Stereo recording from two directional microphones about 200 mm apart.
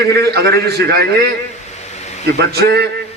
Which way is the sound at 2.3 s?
55° right (ahead or behind).